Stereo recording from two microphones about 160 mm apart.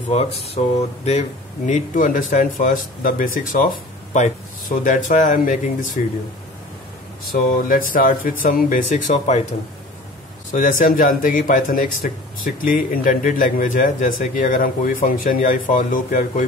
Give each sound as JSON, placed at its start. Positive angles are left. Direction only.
{"t": 0.1, "sound": "speech", "side_deg": 40}
{"t": 1.7, "sound": "speech", "side_deg": 55}
{"t": 7.5, "sound": "speech", "side_deg": 60}
{"t": 10.5, "sound": "speech", "side_deg": 55}